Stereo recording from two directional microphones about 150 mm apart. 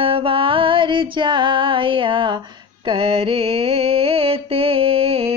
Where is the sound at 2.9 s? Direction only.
40° right (ahead or behind).